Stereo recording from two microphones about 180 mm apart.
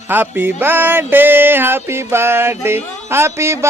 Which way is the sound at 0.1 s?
10° right (ahead or behind).